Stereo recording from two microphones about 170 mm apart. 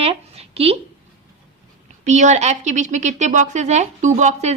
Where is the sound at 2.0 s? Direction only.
45° right (ahead or behind).